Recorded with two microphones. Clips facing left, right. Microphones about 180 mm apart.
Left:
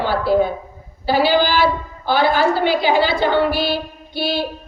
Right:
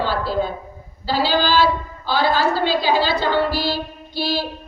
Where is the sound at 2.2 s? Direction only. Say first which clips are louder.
Left 2 dB; 20° left (ahead or behind).